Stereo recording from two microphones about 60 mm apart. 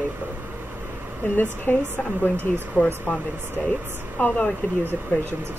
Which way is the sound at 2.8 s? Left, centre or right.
Right.